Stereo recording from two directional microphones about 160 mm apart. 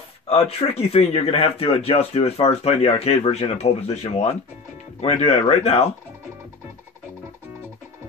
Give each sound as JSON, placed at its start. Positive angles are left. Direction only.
{"t": 0.3, "sound": "speech", "side_deg": 40}